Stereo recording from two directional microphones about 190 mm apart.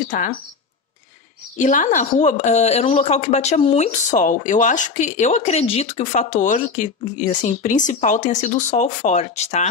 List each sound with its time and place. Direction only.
0.1 s speech: 45° left (ahead or behind)
1.6 s a woman's voice: 45° left (ahead or behind)